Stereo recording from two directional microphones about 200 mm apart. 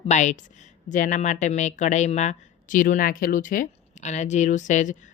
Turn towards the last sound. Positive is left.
turn(degrees=40)  # may be behind; listen again after turning